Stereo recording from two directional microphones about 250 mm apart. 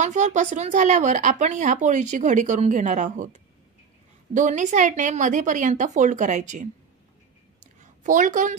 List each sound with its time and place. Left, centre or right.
0.0 s speech: right
4.3 s speech: right
7.6 s a sound: right